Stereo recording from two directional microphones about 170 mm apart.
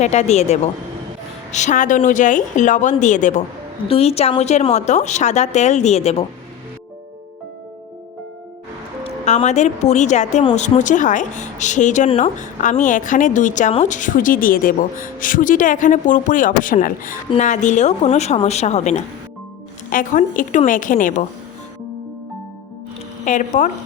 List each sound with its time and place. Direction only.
0.0 s a woman's voice: 40° left (ahead or behind)
9.0 s speech: 40° left (ahead or behind)
19.9 s speech: 50° left (ahead or behind)
23.2 s speech: 45° left (ahead or behind)